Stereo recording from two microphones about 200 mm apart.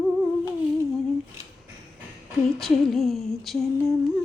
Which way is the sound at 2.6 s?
Centre (ahead or behind).